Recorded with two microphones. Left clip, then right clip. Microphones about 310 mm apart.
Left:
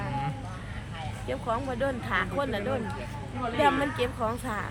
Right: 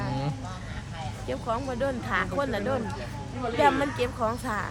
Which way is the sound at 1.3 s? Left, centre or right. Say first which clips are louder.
Even; centre.